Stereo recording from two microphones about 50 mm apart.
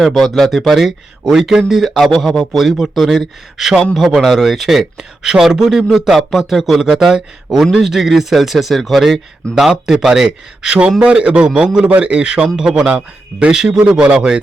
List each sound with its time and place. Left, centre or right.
0.0 s a man's voice: centre; by 12.5 s right
12.5 s a man's voice: centre